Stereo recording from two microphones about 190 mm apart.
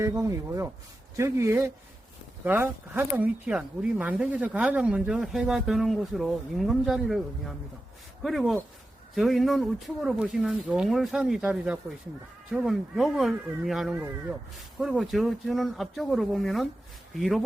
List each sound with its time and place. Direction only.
0.0 s speech: 15° right (ahead or behind)
8.2 s speech: centre (ahead or behind)